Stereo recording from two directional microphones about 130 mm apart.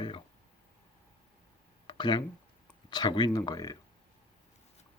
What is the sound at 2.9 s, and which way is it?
Speech, 35° left (ahead or behind).